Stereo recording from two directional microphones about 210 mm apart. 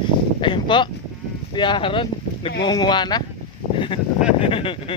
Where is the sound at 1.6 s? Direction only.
20° left (ahead or behind).